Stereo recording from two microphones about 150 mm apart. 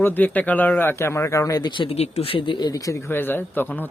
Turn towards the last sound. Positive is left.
turn(degrees=15)  # may be behind; listen again after turning